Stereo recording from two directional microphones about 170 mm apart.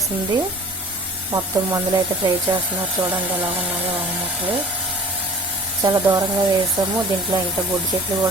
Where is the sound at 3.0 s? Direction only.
10° right (ahead or behind).